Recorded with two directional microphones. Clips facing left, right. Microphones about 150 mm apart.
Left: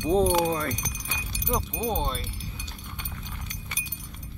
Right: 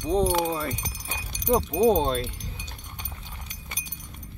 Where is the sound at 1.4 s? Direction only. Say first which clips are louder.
Right 9 dB; 35° right (ahead or behind).